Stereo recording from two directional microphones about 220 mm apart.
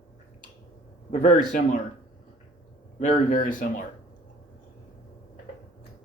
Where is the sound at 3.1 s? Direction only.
40° left (ahead or behind).